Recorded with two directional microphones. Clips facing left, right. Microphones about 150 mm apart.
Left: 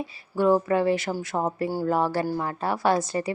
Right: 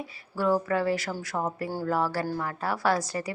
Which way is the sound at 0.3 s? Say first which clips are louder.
Left 4 dB; 20° left (ahead or behind).